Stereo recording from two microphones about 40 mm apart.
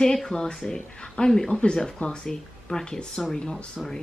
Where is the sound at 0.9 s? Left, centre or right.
Left.